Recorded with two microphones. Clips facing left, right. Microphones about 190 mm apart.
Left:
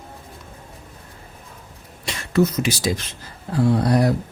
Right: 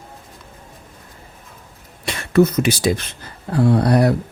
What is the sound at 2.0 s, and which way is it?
Speech, 60° right (ahead or behind).